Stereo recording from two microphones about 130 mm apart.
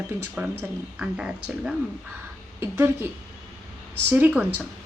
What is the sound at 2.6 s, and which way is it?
Speech, 20° right (ahead or behind).